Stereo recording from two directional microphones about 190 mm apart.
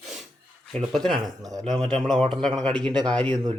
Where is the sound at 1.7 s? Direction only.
5° left (ahead or behind).